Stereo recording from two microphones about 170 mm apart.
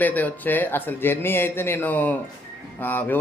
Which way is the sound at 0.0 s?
10° left (ahead or behind).